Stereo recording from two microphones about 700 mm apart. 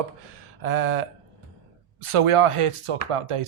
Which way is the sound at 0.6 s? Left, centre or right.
Right.